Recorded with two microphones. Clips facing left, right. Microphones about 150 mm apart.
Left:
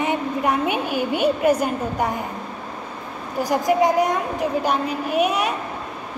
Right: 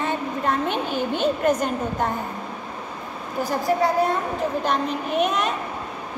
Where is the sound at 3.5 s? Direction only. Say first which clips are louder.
Left 3 dB; 15° left (ahead or behind).